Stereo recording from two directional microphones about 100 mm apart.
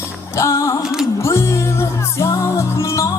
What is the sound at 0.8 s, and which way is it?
Music, 5° right (ahead or behind).